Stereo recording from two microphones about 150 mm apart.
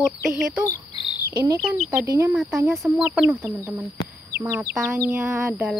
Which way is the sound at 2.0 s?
20° right (ahead or behind).